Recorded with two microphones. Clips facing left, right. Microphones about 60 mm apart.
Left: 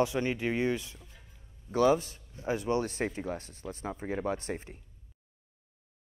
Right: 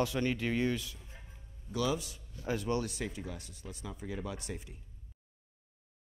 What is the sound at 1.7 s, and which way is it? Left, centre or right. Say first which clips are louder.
Speech: left 8 dB; left.